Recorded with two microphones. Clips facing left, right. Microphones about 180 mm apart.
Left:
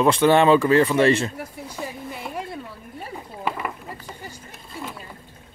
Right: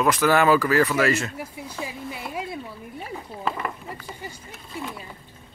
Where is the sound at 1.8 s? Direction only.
5° right (ahead or behind).